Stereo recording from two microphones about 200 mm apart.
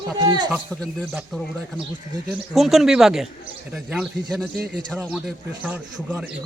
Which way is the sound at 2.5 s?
Centre (ahead or behind).